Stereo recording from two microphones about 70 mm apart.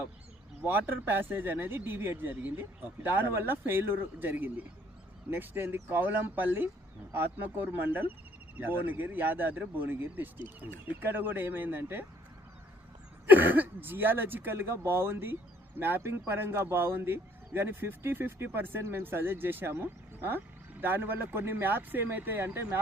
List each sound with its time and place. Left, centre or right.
0.7 s speech: right
13.2 s speech: right